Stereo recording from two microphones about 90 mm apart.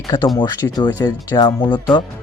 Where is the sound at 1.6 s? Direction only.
60° left (ahead or behind).